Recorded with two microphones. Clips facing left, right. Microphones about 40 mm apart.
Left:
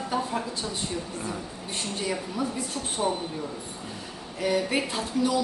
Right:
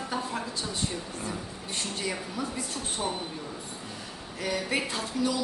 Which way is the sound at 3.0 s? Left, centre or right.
Centre.